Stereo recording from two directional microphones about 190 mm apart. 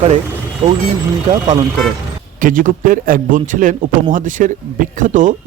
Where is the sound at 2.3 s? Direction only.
45° right (ahead or behind).